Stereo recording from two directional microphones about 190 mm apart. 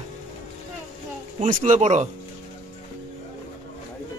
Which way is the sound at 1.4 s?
40° right (ahead or behind).